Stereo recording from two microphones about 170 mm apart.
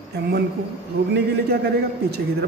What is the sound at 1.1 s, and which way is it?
A man's voice, 70° right (ahead or behind).